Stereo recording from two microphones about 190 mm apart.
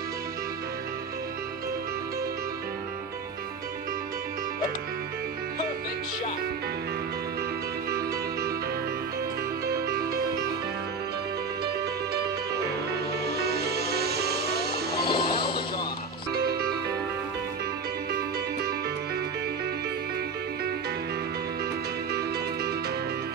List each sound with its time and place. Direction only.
7.9 s music: 55° right (ahead or behind)
11.6 s music: 55° right (ahead or behind)
15.0 s music: 25° left (ahead or behind)